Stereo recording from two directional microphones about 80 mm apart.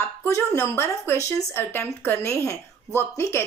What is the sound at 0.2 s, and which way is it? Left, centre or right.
Speech, left.